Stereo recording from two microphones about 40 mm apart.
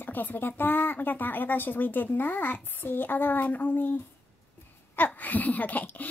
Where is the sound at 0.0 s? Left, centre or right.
Left.